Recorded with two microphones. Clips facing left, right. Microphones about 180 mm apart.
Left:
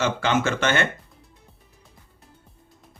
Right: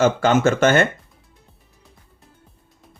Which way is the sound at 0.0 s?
45° right (ahead or behind).